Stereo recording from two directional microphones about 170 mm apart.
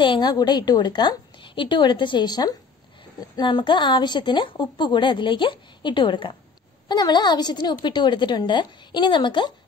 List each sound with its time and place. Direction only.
0.0 s a woman's voice: 25° left (ahead or behind)